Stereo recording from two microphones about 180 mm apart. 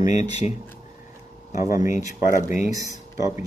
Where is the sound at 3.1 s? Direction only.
20° right (ahead or behind).